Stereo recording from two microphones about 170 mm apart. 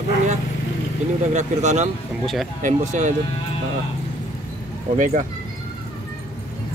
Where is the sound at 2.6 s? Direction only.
50° right (ahead or behind).